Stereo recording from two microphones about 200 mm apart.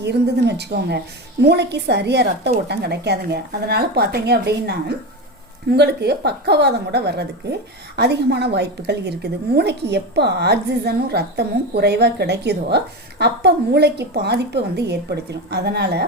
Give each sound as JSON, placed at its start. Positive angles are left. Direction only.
{"t": 0.0, "sound": "a woman's voice", "side_deg": -55}